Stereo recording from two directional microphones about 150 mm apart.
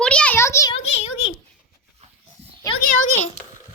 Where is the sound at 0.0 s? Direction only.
5° left (ahead or behind).